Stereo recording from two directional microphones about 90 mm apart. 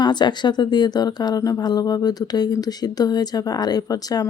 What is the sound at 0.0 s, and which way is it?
Speech, 55° left (ahead or behind).